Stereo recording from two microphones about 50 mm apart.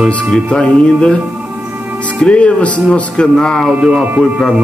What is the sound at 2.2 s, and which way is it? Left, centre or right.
A man's voice, left.